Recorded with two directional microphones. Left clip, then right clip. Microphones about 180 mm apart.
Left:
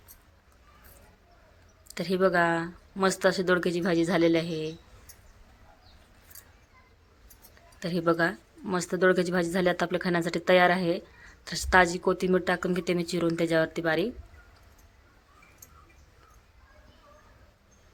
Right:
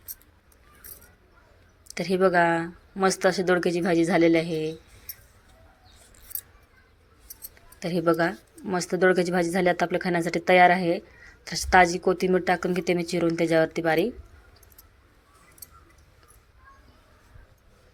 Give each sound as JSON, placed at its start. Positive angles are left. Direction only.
{"t": 2.0, "sound": "speech", "side_deg": -15}
{"t": 7.8, "sound": "speech", "side_deg": -10}